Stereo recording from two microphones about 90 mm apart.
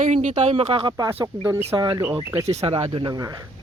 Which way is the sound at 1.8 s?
50° right (ahead or behind).